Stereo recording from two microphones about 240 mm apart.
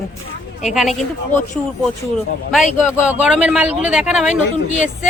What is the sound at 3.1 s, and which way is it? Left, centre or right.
Speech, centre.